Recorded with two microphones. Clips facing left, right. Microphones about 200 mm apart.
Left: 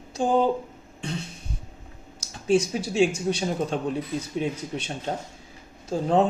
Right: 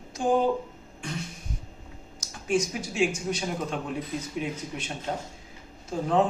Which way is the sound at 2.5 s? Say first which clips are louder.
Left 5 dB; 30° left (ahead or behind).